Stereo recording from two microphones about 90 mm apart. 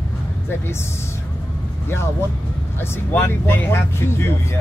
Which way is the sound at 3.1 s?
25° left (ahead or behind).